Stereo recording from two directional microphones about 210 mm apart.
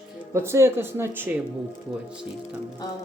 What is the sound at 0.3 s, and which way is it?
Speech, 10° right (ahead or behind).